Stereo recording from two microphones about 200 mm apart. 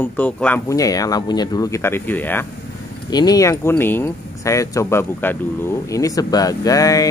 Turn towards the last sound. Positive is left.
turn(degrees=15)  # may be behind; listen again after turning